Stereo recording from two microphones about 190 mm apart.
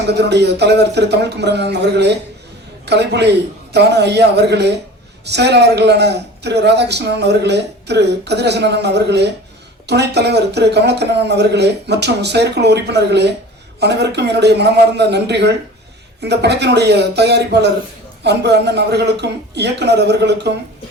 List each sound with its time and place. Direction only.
0.1 s speech: 60° right (ahead or behind)